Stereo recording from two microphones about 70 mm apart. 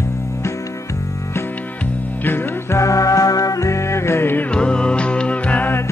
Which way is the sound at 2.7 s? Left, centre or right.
Left.